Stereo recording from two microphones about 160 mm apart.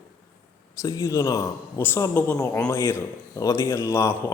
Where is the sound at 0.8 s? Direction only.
20° left (ahead or behind).